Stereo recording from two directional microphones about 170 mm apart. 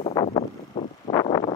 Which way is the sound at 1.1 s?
25° left (ahead or behind).